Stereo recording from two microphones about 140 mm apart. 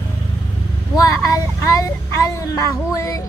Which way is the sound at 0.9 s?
25° left (ahead or behind).